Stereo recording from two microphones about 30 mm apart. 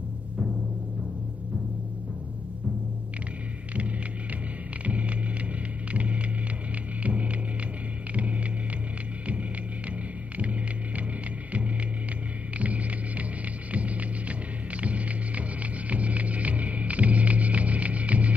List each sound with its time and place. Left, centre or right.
3.7 s music: right
5.9 s vehicle: right
7.0 s hum: right
8.1 s music: right
12.5 s hum: right